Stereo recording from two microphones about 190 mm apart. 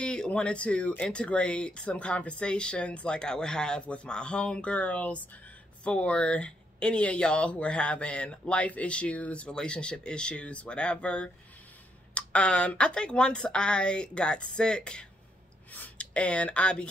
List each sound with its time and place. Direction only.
0.0 s speech: 5° left (ahead or behind)